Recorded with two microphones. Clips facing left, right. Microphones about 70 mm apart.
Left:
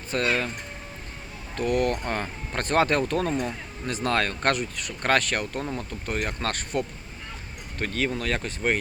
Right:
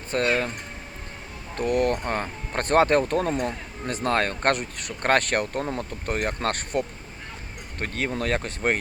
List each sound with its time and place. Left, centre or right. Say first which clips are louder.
0.1 s speech: right 2 dB; right
1.5 s speech: right 1 dB; right
3.3 s speech: right 1 dB; right